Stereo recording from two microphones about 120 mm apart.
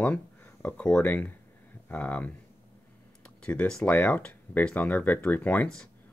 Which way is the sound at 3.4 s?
10° left (ahead or behind).